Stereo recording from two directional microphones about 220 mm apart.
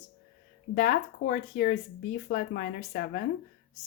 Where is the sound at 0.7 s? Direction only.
40° left (ahead or behind).